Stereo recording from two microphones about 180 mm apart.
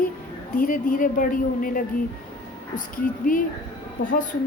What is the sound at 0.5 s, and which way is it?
A woman's voice, 50° left (ahead or behind).